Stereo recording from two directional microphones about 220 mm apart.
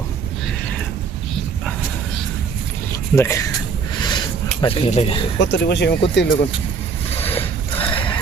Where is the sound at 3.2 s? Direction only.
15° left (ahead or behind).